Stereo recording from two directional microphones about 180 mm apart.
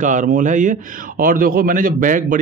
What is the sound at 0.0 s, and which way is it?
Speech, 45° right (ahead or behind).